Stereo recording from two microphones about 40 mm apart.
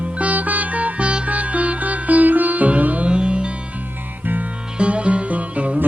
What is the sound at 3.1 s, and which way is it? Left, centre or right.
Music, right.